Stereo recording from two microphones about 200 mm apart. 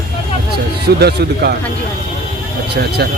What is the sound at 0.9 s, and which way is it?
Speech, 55° right (ahead or behind).